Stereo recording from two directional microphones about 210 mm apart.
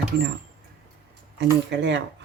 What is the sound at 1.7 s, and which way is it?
Speech, 55° right (ahead or behind).